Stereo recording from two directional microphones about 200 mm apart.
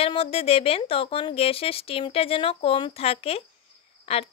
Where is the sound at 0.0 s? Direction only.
30° left (ahead or behind).